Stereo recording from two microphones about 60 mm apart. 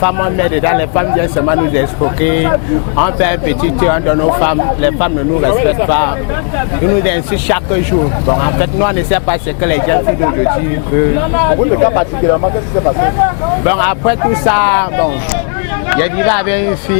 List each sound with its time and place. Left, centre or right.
0.0 s speech: left